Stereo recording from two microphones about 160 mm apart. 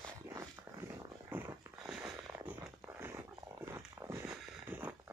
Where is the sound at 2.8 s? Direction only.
15° right (ahead or behind).